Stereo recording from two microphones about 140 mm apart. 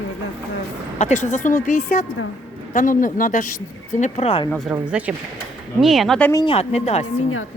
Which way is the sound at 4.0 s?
50° left (ahead or behind).